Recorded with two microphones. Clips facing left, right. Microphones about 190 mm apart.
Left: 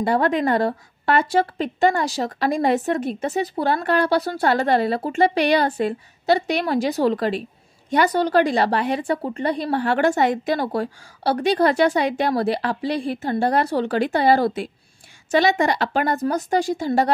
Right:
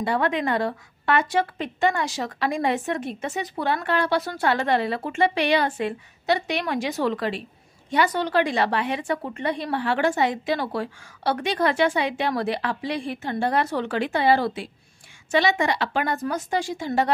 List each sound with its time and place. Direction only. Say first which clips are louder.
0.0 s a woman's voice: left 4 dB; 40° left (ahead or behind)